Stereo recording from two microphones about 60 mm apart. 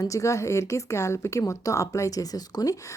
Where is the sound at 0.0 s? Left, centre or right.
Left.